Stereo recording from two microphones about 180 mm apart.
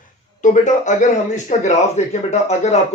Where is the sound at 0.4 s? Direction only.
45° left (ahead or behind).